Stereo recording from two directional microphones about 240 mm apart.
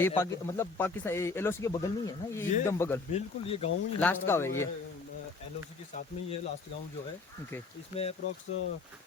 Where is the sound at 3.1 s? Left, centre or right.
Left.